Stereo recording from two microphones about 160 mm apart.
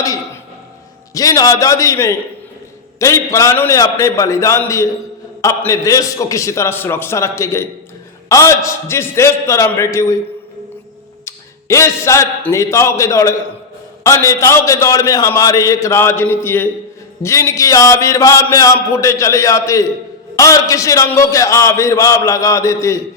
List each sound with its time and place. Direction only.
1.1 s a man's voice: 20° left (ahead or behind)
11.3 s a man's voice: 20° left (ahead or behind)